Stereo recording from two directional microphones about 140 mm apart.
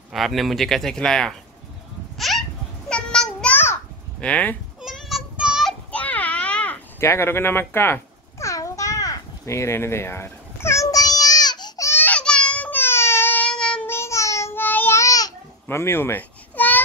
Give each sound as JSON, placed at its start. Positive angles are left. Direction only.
{"t": 0.1, "sound": "speech", "side_deg": 0}
{"t": 2.1, "sound": "a sound", "side_deg": 0}
{"t": 4.2, "sound": "speech", "side_deg": 10}
{"t": 4.8, "sound": "child singing", "side_deg": -5}
{"t": 5.9, "sound": "a sound", "side_deg": 10}
{"t": 13.8, "sound": "babbling", "side_deg": 20}